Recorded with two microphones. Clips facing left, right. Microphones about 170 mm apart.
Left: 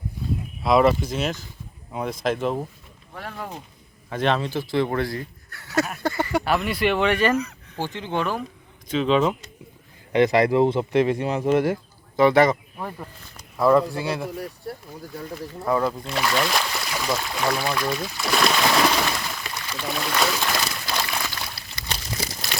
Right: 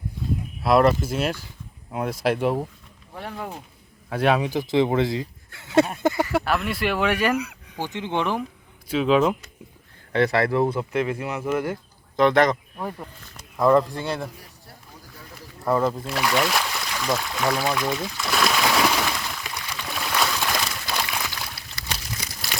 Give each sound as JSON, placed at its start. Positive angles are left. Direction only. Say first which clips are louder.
{"t": 0.6, "sound": "speech", "louder": "even", "side_deg": 0}
{"t": 6.1, "sound": "speech", "louder": "even", "side_deg": -5}
{"t": 8.9, "sound": "speech", "louder": "right 1 dB", "side_deg": -5}
{"t": 10.1, "sound": "speech", "louder": "left 3 dB", "side_deg": 15}
{"t": 12.1, "sound": "speech", "louder": "left 1 dB", "side_deg": 5}
{"t": 15.6, "sound": "speech", "louder": "right 1 dB", "side_deg": 0}
{"t": 17.7, "sound": "speech", "louder": "right 1 dB", "side_deg": -20}
{"t": 18.2, "sound": "a sound", "louder": "left 2 dB", "side_deg": 0}
{"t": 20.1, "sound": "boat", "louder": "left 1 dB", "side_deg": 0}
{"t": 20.5, "sound": "a sound", "louder": "left 1 dB", "side_deg": 5}
{"t": 20.9, "sound": "a sound", "louder": "left 1 dB", "side_deg": -10}